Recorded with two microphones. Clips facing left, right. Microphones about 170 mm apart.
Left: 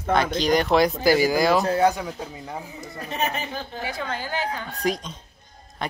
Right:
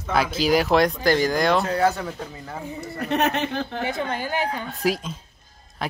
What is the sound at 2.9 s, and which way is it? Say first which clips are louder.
Speech: right 5 dB; 70° right (ahead or behind).